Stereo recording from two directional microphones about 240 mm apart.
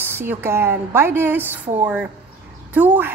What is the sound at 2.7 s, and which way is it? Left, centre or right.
Speech, centre.